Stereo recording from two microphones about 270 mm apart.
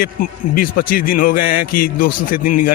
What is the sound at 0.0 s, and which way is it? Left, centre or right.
A man's voice, left.